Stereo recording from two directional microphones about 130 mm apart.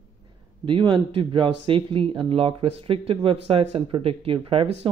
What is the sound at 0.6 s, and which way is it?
Speech, 40° right (ahead or behind).